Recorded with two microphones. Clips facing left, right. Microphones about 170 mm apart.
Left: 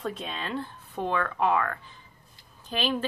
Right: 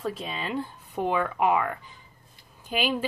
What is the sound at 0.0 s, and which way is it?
A woman's voice, 5° right (ahead or behind).